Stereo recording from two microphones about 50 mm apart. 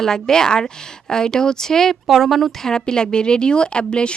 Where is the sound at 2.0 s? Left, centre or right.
Centre.